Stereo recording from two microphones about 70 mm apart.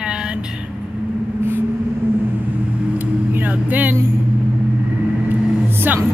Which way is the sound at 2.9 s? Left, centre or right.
Right.